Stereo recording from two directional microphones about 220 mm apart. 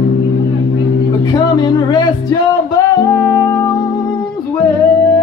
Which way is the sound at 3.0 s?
10° left (ahead or behind).